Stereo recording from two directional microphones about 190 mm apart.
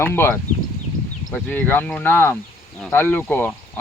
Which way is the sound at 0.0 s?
10° left (ahead or behind).